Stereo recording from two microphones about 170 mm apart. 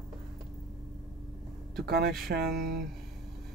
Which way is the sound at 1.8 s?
65° right (ahead or behind).